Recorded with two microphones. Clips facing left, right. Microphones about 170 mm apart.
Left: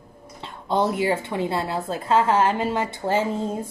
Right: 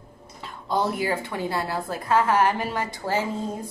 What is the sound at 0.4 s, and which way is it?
A woman's voice, 25° left (ahead or behind).